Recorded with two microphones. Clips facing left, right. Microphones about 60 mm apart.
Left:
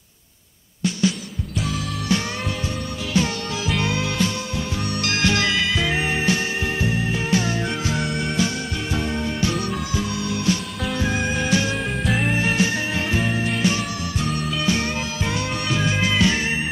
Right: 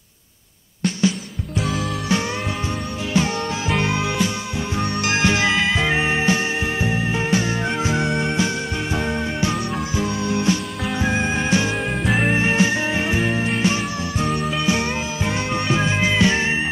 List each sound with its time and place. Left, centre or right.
3.1 s music: right
12.0 s music: centre
12.3 s music: right